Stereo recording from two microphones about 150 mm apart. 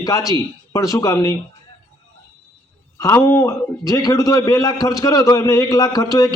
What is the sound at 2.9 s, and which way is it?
A man's voice, 20° left (ahead or behind).